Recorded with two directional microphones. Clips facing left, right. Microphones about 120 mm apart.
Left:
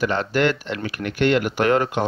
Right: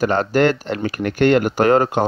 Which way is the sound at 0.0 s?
40° right (ahead or behind).